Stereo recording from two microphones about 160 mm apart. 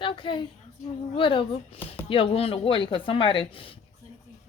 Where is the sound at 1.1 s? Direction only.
35° left (ahead or behind).